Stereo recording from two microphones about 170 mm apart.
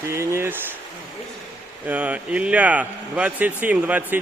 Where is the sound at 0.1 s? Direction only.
15° right (ahead or behind).